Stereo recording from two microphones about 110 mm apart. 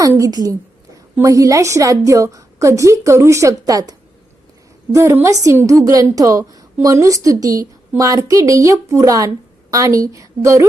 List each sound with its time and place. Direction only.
0.0 s a woman's voice: 30° right (ahead or behind)